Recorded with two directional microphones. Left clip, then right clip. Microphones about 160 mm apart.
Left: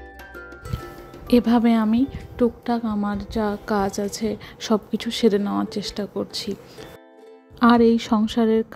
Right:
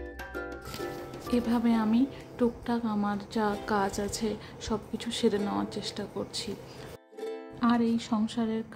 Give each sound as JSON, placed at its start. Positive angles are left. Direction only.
{"t": 1.3, "sound": "a woman's voice", "side_deg": 50}
{"t": 4.6, "sound": "a woman's voice", "side_deg": 45}
{"t": 7.6, "sound": "speech", "side_deg": 50}